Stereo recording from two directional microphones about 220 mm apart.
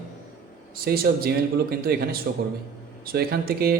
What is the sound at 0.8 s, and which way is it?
Speech, 45° right (ahead or behind).